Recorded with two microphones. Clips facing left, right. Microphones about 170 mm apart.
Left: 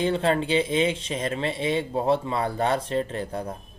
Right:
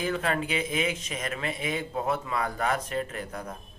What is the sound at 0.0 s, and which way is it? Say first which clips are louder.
Speech: left 6 dB; 30° left (ahead or behind).